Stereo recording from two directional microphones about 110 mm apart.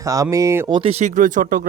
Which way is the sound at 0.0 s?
30° right (ahead or behind).